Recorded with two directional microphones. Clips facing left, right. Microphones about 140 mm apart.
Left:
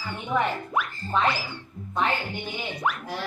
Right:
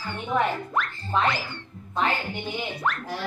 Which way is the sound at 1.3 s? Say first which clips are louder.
Even; 10° left (ahead or behind).